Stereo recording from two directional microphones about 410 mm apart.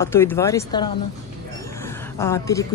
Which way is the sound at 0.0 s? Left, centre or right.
Centre.